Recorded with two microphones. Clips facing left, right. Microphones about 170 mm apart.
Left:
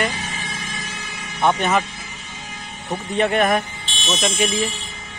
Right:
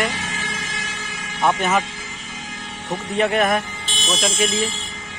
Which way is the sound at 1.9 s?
90° right.